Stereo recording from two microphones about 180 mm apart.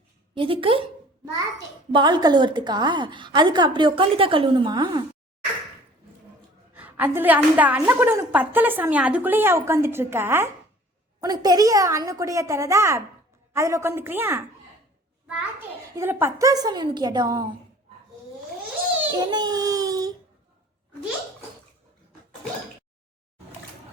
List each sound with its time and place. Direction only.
0.3 s a woman's voice: 30° right (ahead or behind)
1.9 s a woman's voice: 25° right (ahead or behind)
6.7 s a woman's voice: 10° right (ahead or behind)
16.0 s a woman's voice: 10° right (ahead or behind)
19.1 s speech: 25° right (ahead or behind)